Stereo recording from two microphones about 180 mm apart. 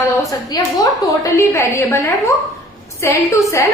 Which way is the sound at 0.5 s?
20° left (ahead or behind).